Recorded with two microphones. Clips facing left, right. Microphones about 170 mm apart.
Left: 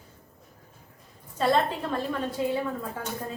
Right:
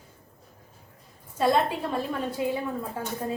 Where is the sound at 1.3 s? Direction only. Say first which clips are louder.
Right 1 dB; 10° right (ahead or behind).